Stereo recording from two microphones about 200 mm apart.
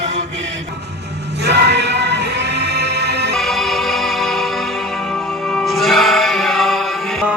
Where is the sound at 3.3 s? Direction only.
Centre (ahead or behind).